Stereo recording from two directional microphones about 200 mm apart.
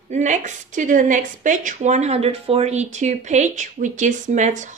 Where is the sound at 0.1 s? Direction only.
35° right (ahead or behind).